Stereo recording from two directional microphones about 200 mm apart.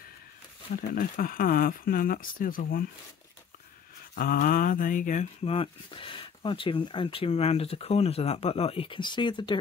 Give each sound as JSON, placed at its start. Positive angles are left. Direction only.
{"t": 0.7, "sound": "speech", "side_deg": 45}
{"t": 4.1, "sound": "speech", "side_deg": 45}